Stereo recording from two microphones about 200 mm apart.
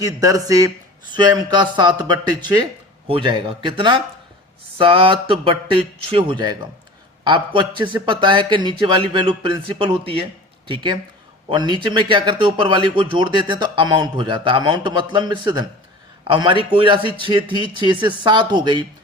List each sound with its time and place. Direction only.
0.0 s speech: 20° right (ahead or behind)
11.4 s speech: 25° right (ahead or behind)